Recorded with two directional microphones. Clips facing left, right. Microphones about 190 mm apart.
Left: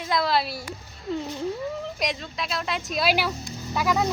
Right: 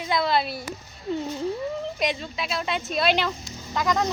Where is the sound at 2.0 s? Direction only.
Centre (ahead or behind).